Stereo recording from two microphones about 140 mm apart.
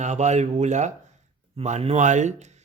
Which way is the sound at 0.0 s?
55° right (ahead or behind).